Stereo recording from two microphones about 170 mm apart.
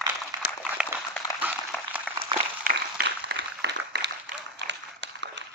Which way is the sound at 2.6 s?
55° right (ahead or behind).